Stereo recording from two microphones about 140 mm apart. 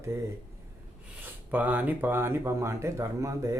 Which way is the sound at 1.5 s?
15° right (ahead or behind).